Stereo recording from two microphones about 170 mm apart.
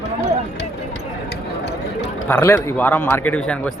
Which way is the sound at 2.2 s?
10° left (ahead or behind).